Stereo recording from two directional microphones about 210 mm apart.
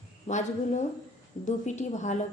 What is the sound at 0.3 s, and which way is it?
A woman's voice, 35° left (ahead or behind).